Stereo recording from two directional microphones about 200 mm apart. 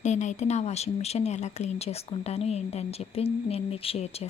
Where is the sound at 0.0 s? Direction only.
35° left (ahead or behind).